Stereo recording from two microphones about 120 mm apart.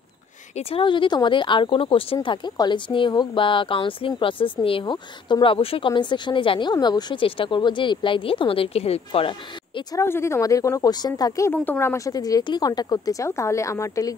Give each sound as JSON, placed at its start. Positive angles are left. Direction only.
{"t": 0.6, "sound": "speech", "side_deg": 50}
{"t": 2.2, "sound": "speech", "side_deg": 40}
{"t": 9.9, "sound": "speech", "side_deg": 20}
{"t": 11.5, "sound": "speech", "side_deg": 15}